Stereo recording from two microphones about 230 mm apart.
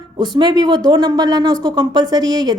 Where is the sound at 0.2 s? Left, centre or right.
Centre.